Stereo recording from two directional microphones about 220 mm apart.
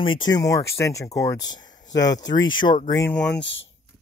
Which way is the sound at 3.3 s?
55° left (ahead or behind).